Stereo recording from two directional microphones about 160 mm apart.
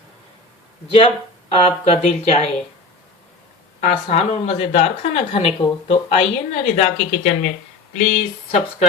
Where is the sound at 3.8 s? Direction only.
45° left (ahead or behind).